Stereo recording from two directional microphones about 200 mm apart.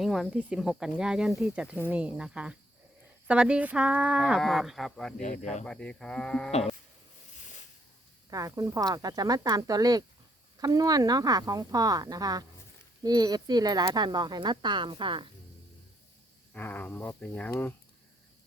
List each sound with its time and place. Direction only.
0.0 s speech: centre (ahead or behind)
5.2 s speech: 35° left (ahead or behind)
5.6 s speech: 5° left (ahead or behind)
8.3 s speech: 15° right (ahead or behind)
16.6 s speech: 10° left (ahead or behind)